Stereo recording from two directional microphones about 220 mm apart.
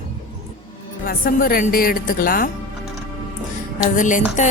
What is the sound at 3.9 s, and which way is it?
Speech, 35° left (ahead or behind).